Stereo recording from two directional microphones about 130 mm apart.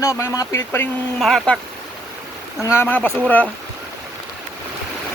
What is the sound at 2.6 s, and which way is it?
Speech, 15° left (ahead or behind).